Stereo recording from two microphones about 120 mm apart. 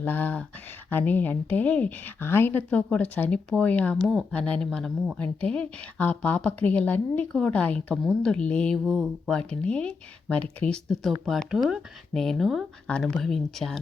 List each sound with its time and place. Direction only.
0.0 s a woman's voice: 15° left (ahead or behind)
8.8 s speech: centre (ahead or behind)